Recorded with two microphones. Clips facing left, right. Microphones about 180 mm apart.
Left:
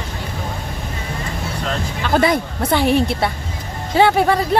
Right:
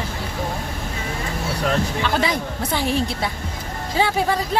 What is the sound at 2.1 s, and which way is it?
A woman's voice, 55° left (ahead or behind).